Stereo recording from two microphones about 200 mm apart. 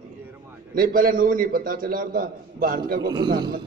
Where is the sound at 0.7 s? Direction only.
45° right (ahead or behind).